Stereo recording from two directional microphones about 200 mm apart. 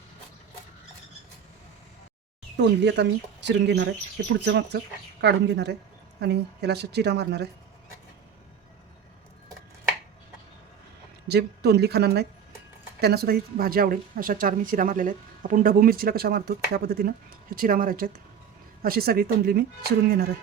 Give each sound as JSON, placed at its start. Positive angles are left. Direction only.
{"t": 2.6, "sound": "speech", "side_deg": -60}
{"t": 11.3, "sound": "a woman's voice", "side_deg": -55}